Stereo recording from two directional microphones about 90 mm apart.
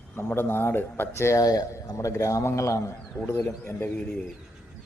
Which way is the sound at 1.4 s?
45° left (ahead or behind).